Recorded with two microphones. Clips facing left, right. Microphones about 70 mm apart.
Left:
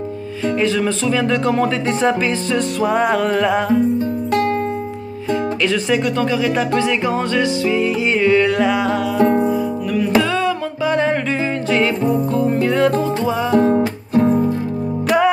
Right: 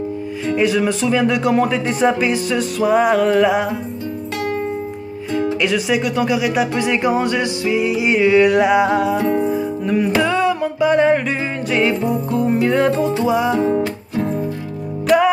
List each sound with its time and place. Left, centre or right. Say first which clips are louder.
0.6 s speech: right 2 dB; centre
5.6 s speech: left 1 dB; centre
9.2 s music: left 3 dB; left
9.5 s music: even; right
12.1 s speech: left 1 dB; centre
15.0 s music: right 2 dB; centre